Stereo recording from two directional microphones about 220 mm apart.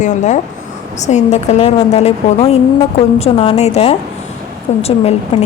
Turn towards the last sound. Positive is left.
turn(degrees=30)  # may be behind; listen again after turning